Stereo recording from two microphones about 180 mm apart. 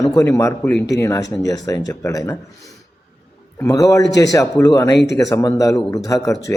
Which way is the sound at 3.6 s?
20° left (ahead or behind).